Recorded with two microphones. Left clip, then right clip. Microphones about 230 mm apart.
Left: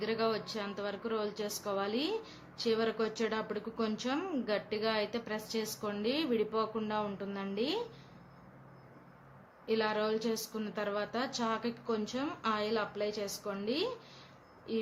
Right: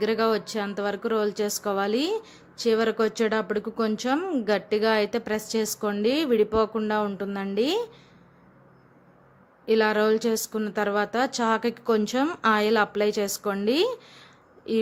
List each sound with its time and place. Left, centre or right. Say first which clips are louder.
0.0 s speech: right 10 dB; right
9.6 s speech: right 11 dB; right